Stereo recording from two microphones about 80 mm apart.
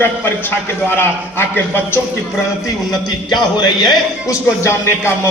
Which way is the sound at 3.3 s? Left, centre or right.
Left.